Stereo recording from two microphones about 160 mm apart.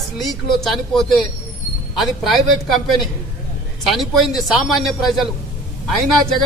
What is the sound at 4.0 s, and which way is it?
Speech, centre (ahead or behind).